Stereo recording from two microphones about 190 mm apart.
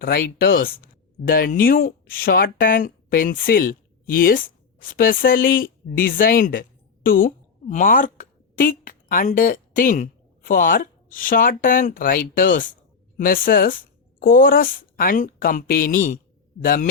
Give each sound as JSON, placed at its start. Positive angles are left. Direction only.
{"t": 0.0, "sound": "speech", "side_deg": 55}